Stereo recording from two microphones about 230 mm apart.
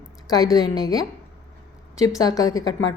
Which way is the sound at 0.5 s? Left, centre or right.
Centre.